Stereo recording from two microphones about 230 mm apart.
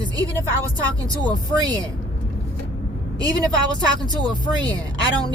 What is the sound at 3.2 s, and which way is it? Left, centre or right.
Speech, centre.